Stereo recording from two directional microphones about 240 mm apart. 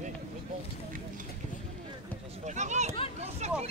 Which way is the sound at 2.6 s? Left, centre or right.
Right.